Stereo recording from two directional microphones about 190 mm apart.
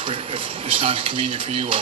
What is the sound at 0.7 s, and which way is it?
Speech, 30° right (ahead or behind).